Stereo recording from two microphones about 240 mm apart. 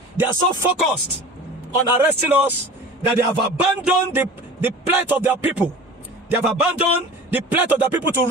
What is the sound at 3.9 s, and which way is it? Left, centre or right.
Speech, centre.